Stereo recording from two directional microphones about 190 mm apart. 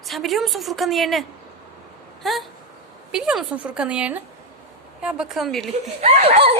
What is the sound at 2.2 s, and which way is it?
A woman's voice, centre (ahead or behind).